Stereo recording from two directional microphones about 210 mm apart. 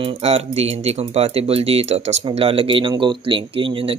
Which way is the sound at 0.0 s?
25° right (ahead or behind).